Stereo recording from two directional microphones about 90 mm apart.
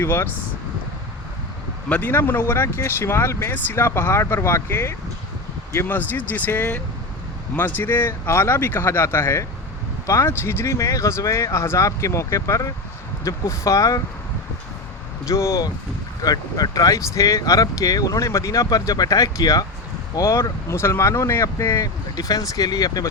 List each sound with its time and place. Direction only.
0.0 s speech: 25° left (ahead or behind)
1.9 s speech: 20° left (ahead or behind); by 14.0 s 40° left (ahead or behind)
15.2 s speech: 35° left (ahead or behind)